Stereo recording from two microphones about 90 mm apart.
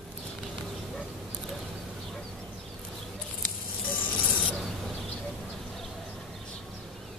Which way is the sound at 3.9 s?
20° left (ahead or behind).